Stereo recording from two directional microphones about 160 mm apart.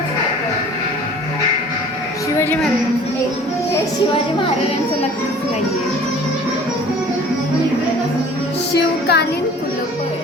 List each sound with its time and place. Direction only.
8.7 s music: 90° left